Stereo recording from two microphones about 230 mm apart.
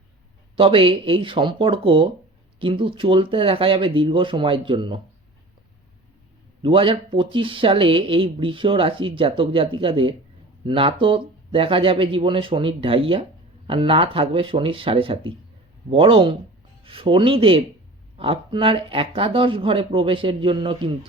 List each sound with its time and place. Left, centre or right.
0.5 s speech: right
6.6 s speech: right